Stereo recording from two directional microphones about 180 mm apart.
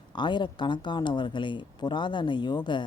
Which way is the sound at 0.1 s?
25° left (ahead or behind).